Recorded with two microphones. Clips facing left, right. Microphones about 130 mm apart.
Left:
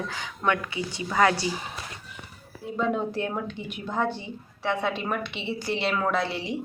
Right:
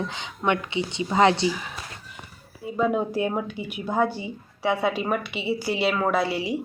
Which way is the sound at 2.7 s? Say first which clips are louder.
Right 3 dB; 5° right (ahead or behind).